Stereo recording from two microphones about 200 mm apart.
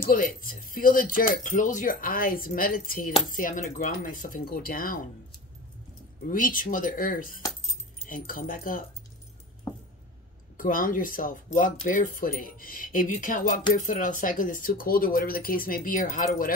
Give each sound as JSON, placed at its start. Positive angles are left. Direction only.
{"t": 0.1, "sound": "speech", "side_deg": 45}
{"t": 6.2, "sound": "speech", "side_deg": 45}
{"t": 10.6, "sound": "speech", "side_deg": 45}